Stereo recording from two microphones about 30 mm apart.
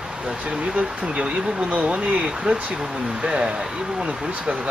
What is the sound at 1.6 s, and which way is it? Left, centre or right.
Speech, right.